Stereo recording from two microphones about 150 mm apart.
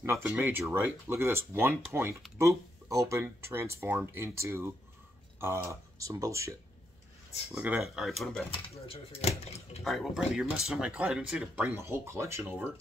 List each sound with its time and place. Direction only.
0.0 s speech: 15° right (ahead or behind)
7.5 s speech: 10° right (ahead or behind)
8.5 s speech: 40° left (ahead or behind)
9.8 s speech: centre (ahead or behind)